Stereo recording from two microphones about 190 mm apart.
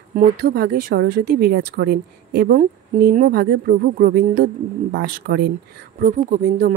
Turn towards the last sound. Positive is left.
turn(degrees=-40)  # may be behind; listen again after turning